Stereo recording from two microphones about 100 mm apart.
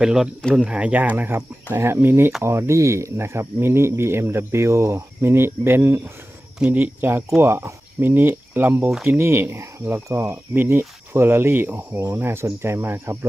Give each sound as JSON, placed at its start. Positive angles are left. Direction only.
{"t": 0.0, "sound": "speech", "side_deg": -5}